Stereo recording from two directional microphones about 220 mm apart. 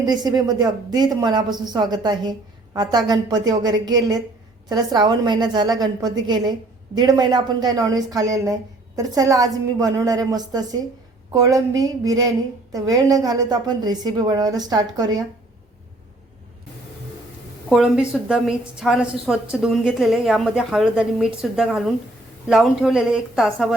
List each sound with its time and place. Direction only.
0.0 s a woman's voice: 20° right (ahead or behind)
17.7 s a woman's voice: centre (ahead or behind)